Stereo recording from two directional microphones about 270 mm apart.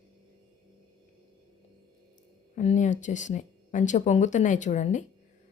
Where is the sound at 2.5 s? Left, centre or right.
Left.